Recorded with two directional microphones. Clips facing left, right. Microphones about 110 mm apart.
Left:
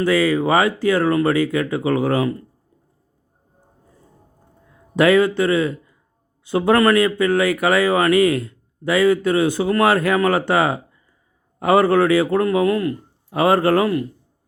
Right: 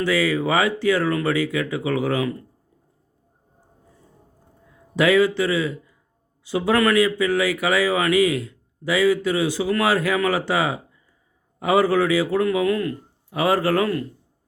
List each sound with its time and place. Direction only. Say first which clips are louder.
0.0 s speech: left 4 dB; 45° left (ahead or behind)
4.9 s a man's voice: left 3 dB; 50° left (ahead or behind)
12.5 s speech: left 3 dB; 30° left (ahead or behind)
13.3 s speech: left 4 dB; 45° left (ahead or behind)
13.7 s speech: left 3 dB; 25° left (ahead or behind)